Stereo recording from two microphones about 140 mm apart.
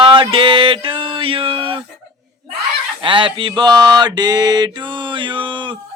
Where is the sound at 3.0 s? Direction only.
35° right (ahead or behind).